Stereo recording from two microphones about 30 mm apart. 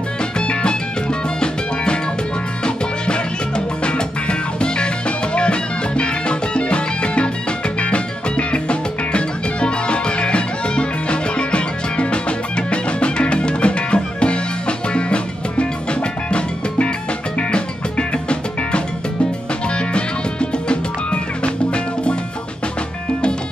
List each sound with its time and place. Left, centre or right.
0.4 s music: left
2.6 s music: left
19.9 s music: left